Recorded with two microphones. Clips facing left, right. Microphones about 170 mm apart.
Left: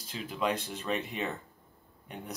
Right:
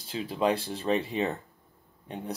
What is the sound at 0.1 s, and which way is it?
Speech, 35° right (ahead or behind).